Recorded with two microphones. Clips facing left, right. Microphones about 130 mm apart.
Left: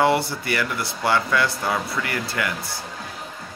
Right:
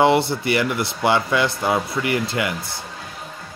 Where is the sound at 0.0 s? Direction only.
25° right (ahead or behind).